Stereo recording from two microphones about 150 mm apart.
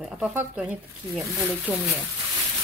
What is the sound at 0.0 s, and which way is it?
Speech, 5° right (ahead or behind).